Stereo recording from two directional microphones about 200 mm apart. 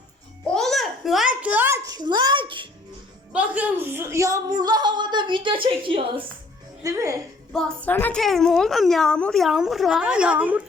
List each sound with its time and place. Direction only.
0.5 s a sound: centre (ahead or behind); by 2.6 s 25° right (ahead or behind)
3.3 s speech: 10° right (ahead or behind)
7.5 s a woman's voice: 5° left (ahead or behind)